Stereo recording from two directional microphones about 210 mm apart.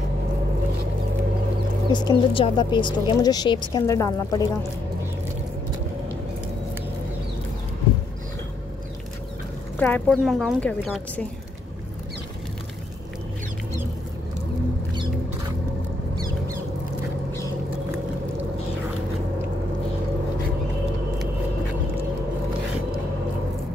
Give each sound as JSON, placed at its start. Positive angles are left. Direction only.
{"t": 1.9, "sound": "speech", "side_deg": 20}
{"t": 9.8, "sound": "a woman's voice", "side_deg": 5}